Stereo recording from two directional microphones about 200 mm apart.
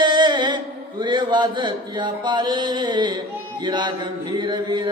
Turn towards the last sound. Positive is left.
turn(degrees=-20)  # may be behind; listen again after turning